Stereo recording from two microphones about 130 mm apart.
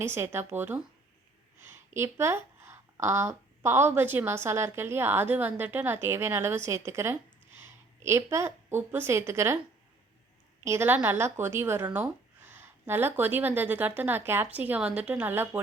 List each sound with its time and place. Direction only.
0.0 s speech: 20° right (ahead or behind)
1.9 s a woman's voice: 20° right (ahead or behind)
10.6 s speech: 20° right (ahead or behind)